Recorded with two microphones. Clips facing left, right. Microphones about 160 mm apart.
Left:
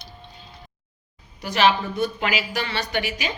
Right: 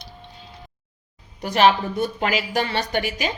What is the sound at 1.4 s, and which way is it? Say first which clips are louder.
A woman's voice: right 3 dB; 45° right (ahead or behind).